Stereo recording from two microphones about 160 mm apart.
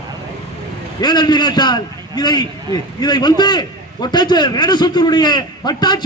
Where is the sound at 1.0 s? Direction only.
25° left (ahead or behind).